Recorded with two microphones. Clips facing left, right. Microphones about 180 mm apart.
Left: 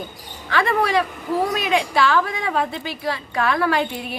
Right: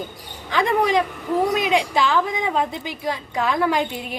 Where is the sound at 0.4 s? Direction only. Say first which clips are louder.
Right 1 dB; 15° right (ahead or behind).